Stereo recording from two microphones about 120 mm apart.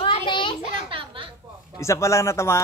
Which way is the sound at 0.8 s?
45° right (ahead or behind).